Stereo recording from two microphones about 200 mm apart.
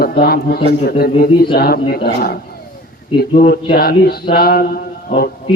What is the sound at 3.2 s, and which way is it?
A man's voice, 50° left (ahead or behind).